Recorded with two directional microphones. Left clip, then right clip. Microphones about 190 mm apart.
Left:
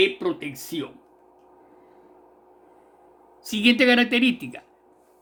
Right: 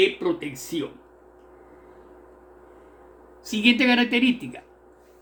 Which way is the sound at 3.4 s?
55° left (ahead or behind).